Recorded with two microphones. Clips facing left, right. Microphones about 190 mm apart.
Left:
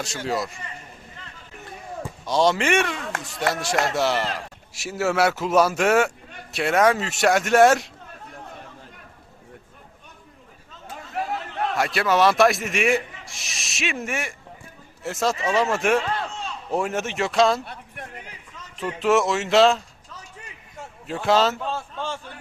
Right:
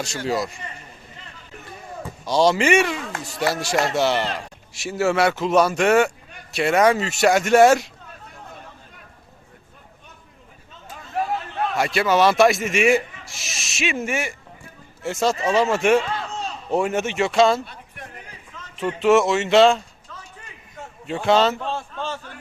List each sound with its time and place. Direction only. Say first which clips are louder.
0.0 s speech: right 2 dB; centre (ahead or behind)
2.2 s speech: right 3 dB; centre (ahead or behind)
11.8 s speech: right 2 dB; centre (ahead or behind)
16.3 s a sound: right 3 dB; 40° right (ahead or behind)
16.7 s speech: right 4 dB; centre (ahead or behind)
18.9 s speech: right 3 dB; centre (ahead or behind)
21.1 s speech: right 2 dB; centre (ahead or behind)